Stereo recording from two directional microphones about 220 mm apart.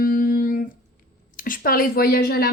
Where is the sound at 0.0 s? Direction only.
40° left (ahead or behind).